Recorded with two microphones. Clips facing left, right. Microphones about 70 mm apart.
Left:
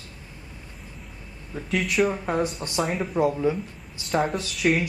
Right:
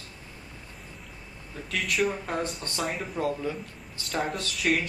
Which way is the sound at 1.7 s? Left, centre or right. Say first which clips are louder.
Left 4 dB; centre.